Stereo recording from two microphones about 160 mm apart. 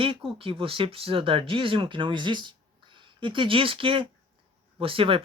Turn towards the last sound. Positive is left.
turn(degrees=-35)  # may be behind; listen again after turning